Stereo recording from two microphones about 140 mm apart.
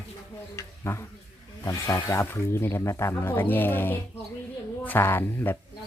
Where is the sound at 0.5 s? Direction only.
20° left (ahead or behind).